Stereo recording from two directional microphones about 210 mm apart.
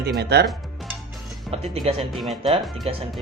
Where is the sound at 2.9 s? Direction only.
30° right (ahead or behind).